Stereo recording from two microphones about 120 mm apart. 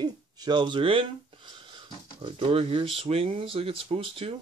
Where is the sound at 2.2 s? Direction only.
50° right (ahead or behind).